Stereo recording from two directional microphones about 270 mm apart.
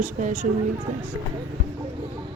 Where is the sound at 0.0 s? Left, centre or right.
Right.